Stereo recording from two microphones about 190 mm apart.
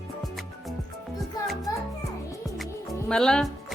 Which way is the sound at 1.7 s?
20° left (ahead or behind).